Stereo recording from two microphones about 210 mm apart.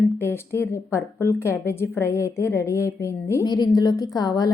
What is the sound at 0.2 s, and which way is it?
A woman's voice, 10° left (ahead or behind).